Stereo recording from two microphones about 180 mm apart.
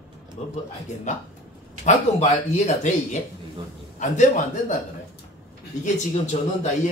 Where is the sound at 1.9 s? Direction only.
40° left (ahead or behind).